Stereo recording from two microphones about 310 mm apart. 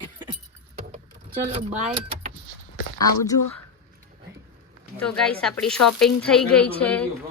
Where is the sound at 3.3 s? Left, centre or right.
Left.